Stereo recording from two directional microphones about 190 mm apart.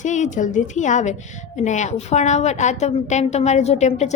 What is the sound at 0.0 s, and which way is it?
A woman's voice, 40° left (ahead or behind).